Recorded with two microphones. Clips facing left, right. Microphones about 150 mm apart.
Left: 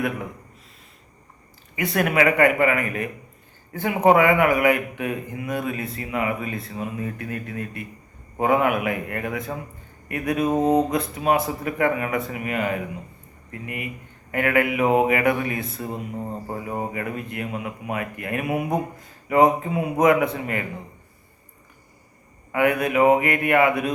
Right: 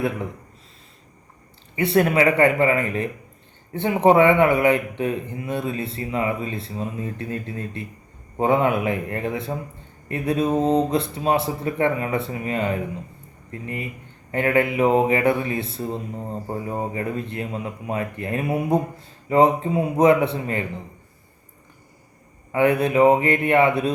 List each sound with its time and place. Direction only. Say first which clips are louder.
1.7 s speech: right 4 dB; 30° right (ahead or behind)
10.4 s mantra: left 1 dB; 10° left (ahead or behind)
10.9 s speech: even; 30° right (ahead or behind)
16.9 s speech: right 2 dB; 30° right (ahead or behind)
22.5 s speech: right 2 dB; 30° right (ahead or behind)